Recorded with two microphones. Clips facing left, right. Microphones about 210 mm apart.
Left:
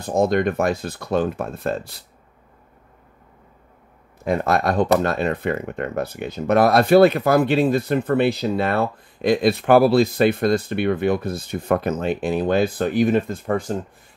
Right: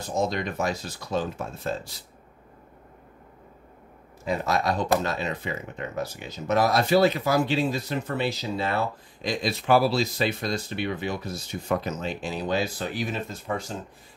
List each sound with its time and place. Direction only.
0.0 s speech: 55° left (ahead or behind)
4.2 s speech: 55° left (ahead or behind)